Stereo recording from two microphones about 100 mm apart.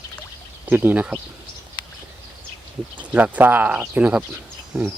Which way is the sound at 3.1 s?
15° right (ahead or behind).